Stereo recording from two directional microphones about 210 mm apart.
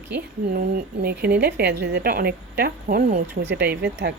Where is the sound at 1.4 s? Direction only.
50° right (ahead or behind).